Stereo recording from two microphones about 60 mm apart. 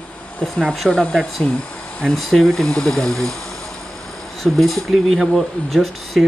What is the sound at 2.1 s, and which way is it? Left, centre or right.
Speech, centre.